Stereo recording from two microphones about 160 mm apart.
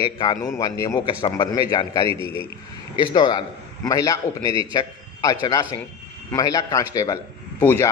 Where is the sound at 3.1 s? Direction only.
25° left (ahead or behind).